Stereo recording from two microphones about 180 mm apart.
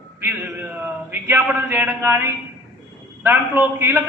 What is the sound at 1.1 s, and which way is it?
A man's voice, 10° right (ahead or behind).